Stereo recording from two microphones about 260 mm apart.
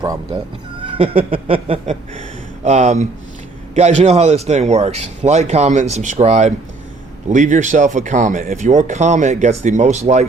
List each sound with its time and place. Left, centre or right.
0.8 s speech: right